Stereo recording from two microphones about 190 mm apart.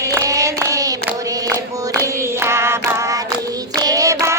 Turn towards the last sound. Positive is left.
turn(degrees=-15)  # may be behind; listen again after turning